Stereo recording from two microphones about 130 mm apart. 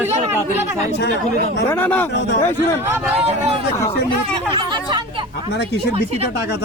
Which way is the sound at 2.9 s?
10° right (ahead or behind).